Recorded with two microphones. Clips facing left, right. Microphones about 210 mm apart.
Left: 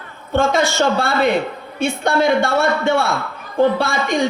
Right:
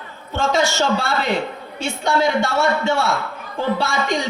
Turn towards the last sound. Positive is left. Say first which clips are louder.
# left 3 dB
turn(degrees=55)  # may be behind; listen again after turning